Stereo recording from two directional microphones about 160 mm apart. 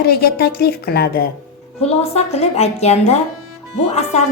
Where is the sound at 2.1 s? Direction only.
45° left (ahead or behind).